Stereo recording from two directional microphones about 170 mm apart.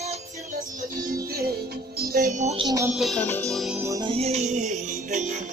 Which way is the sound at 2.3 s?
45° right (ahead or behind).